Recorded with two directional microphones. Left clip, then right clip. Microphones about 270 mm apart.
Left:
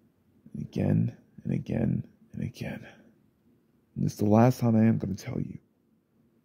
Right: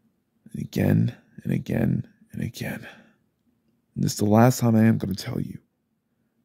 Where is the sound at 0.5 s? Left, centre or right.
Centre.